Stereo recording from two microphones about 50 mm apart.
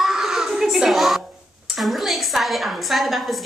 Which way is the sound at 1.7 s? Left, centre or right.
Centre.